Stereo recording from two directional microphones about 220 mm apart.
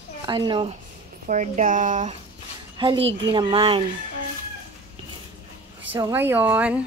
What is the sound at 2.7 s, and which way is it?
A woman's voice, 25° right (ahead or behind).